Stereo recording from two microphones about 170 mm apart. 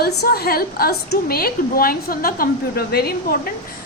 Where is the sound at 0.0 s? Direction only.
65° left (ahead or behind).